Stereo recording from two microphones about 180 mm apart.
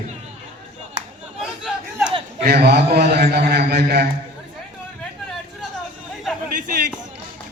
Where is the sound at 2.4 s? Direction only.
60° right (ahead or behind).